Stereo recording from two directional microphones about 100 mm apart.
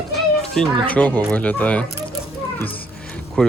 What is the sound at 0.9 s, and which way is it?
Speech, 15° left (ahead or behind).